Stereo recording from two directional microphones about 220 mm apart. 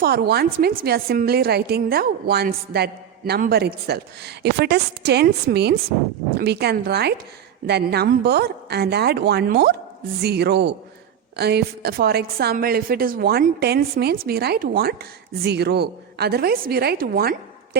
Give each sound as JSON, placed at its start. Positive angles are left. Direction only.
{"t": 0.0, "sound": "a woman's voice", "side_deg": -45}